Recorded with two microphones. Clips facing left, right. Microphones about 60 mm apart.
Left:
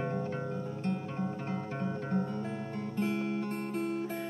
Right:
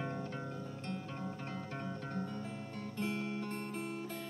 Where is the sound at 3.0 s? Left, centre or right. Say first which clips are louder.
Left 6 dB; centre.